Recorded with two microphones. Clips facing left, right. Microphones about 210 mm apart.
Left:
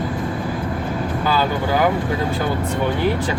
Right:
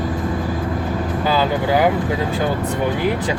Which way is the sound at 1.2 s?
15° right (ahead or behind).